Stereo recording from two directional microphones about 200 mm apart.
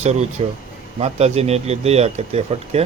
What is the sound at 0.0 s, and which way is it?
Speech, 35° right (ahead or behind).